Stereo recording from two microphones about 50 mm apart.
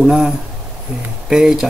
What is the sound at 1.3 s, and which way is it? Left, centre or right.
Speech, centre.